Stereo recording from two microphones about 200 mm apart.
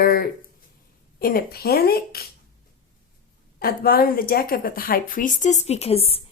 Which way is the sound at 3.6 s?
45° left (ahead or behind).